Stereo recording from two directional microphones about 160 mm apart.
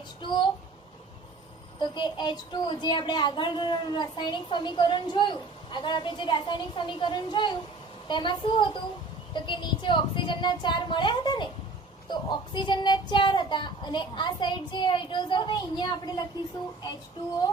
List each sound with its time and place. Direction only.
0.2 s speech: 30° left (ahead or behind)
1.8 s speech: 30° left (ahead or behind)